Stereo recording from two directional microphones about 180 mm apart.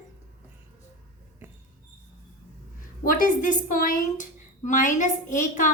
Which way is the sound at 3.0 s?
50° left (ahead or behind).